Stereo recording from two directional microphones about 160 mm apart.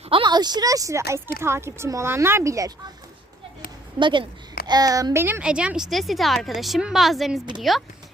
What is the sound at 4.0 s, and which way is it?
A woman's voice, 30° right (ahead or behind).